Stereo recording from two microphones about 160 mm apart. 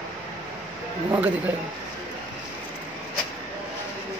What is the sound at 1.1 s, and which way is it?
Speech, 10° right (ahead or behind).